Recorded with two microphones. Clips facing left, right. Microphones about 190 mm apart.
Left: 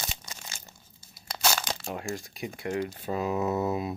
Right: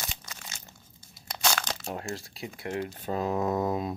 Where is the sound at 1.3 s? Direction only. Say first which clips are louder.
Left 1 dB; 10° left (ahead or behind).